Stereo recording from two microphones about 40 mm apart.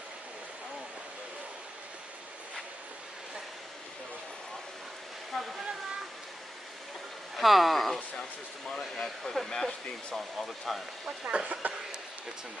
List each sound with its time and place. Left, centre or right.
5.3 s waterfall: centre
7.3 s speech: centre
10.1 s speech: centre
11.1 s speech: right
11.6 s speech: right